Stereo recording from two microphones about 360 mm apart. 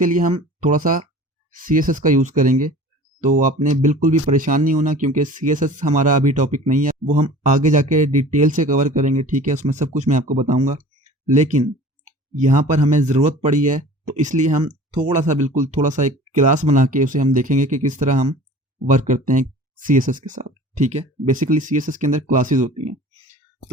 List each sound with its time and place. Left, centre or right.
0.0 s speech: right